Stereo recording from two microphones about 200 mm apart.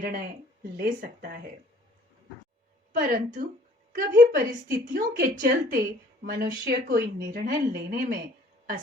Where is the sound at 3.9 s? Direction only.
45° right (ahead or behind).